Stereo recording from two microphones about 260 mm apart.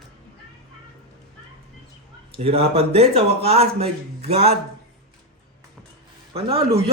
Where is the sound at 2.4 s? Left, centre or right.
Right.